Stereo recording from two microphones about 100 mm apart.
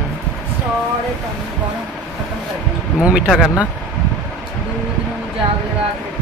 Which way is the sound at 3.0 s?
10° right (ahead or behind).